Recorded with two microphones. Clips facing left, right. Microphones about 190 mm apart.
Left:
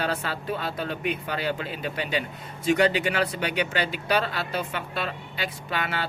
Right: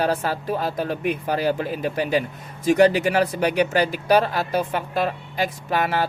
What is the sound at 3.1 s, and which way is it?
Speech, 40° right (ahead or behind).